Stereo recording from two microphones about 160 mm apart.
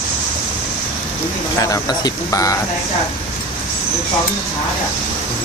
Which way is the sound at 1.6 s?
25° left (ahead or behind).